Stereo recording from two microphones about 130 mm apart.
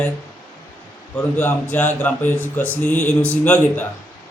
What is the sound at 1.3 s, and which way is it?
A man's voice, 15° left (ahead or behind).